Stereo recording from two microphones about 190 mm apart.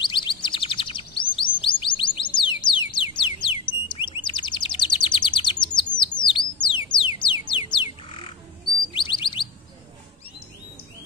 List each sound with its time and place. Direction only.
0.0 s chirp: 25° left (ahead or behind)
2.9 s bird: 25° left (ahead or behind)
5.9 s music: 25° left (ahead or behind)
8.9 s bird: 25° left (ahead or behind)